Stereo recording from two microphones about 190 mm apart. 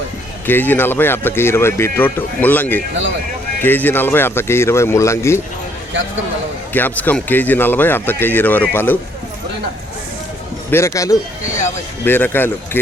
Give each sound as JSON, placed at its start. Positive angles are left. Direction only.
{"t": 0.4, "sound": "speech", "side_deg": 10}
{"t": 6.7, "sound": "speech", "side_deg": 10}
{"t": 10.7, "sound": "speech", "side_deg": 15}